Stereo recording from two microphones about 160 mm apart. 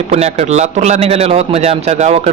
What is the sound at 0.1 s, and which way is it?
A man's voice, 45° right (ahead or behind).